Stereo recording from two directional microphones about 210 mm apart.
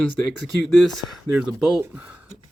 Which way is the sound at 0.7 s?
Centre (ahead or behind).